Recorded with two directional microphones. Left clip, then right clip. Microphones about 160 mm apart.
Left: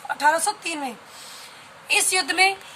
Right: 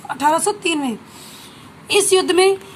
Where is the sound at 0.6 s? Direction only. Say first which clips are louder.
Right 8 dB; 25° right (ahead or behind).